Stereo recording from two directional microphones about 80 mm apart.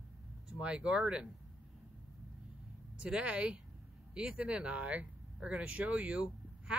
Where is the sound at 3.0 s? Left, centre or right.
Centre.